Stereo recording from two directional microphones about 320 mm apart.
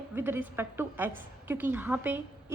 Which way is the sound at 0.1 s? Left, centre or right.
Centre.